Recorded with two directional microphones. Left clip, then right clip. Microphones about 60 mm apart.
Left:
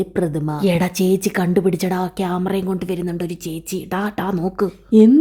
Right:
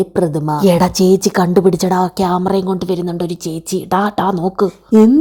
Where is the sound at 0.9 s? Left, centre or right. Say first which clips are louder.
Right 6 dB; right.